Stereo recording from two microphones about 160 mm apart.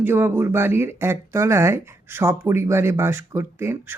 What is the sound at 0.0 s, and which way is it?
Speech, 15° right (ahead or behind).